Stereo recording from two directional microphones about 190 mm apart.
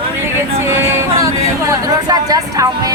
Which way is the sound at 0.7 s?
15° right (ahead or behind).